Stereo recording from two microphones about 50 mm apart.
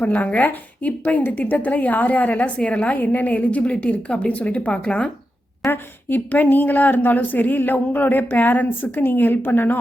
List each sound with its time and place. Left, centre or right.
0.0 s speech: left
5.7 s speech: left